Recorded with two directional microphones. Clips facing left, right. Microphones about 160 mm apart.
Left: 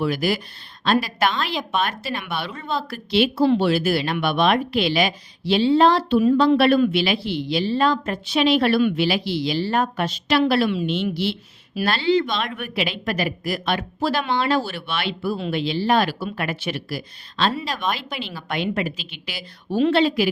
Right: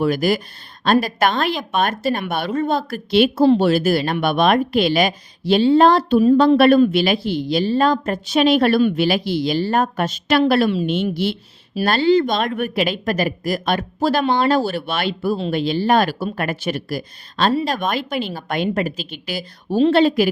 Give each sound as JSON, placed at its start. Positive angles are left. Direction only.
{"t": 0.0, "sound": "a woman's voice", "side_deg": -45}